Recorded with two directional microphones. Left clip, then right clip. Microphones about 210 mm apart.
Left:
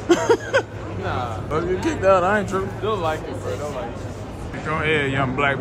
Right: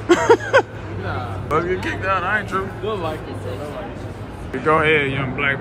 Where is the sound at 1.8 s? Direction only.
35° left (ahead or behind).